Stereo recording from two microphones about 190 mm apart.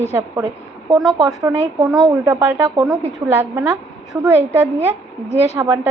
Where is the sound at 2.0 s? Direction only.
15° right (ahead or behind).